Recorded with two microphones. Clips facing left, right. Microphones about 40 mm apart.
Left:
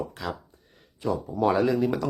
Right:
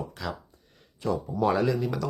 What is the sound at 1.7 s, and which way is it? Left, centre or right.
Speech, left.